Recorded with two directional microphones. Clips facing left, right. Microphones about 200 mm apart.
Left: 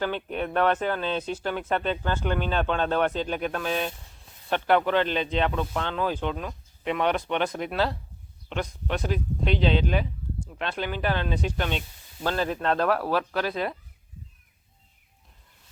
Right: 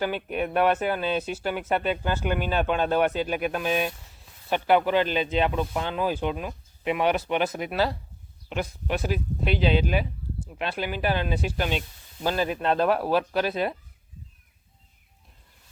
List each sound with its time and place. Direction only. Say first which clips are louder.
0.0 s speech: right 1 dB; 10° right (ahead or behind)
12.7 s speech: right 2 dB; 25° right (ahead or behind)